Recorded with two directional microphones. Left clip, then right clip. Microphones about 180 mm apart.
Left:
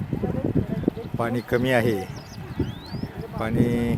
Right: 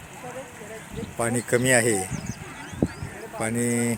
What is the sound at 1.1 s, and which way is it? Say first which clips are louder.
Speech: right 3 dB; 5° right (ahead or behind).